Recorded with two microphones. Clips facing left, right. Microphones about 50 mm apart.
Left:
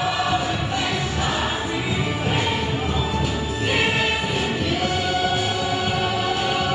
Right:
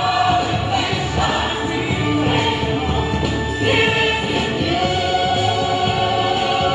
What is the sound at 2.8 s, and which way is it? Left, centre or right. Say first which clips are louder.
Music: right 4 dB; right.